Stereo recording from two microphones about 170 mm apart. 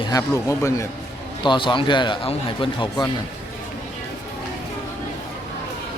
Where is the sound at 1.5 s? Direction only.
30° left (ahead or behind).